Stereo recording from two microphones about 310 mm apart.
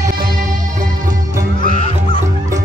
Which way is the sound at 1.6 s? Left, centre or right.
Left.